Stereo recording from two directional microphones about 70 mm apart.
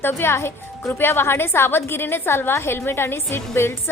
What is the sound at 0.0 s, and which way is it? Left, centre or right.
A woman's voice, left.